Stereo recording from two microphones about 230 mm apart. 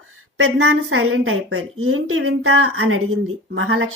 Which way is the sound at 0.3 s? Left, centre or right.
Right.